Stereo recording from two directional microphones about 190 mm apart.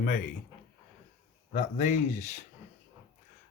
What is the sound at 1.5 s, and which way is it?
Speech, 40° left (ahead or behind).